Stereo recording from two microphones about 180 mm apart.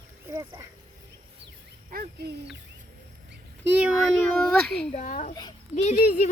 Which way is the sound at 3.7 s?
5° right (ahead or behind).